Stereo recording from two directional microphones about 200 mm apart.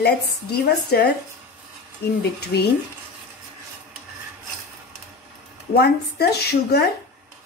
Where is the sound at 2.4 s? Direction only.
55° left (ahead or behind).